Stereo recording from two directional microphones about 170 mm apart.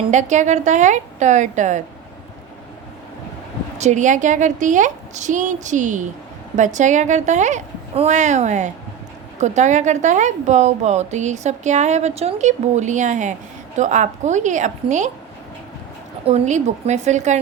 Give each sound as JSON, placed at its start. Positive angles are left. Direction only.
{"t": 0.1, "sound": "a woman's voice", "side_deg": -45}
{"t": 3.8, "sound": "a woman's voice", "side_deg": -45}
{"t": 16.2, "sound": "a woman's voice", "side_deg": -40}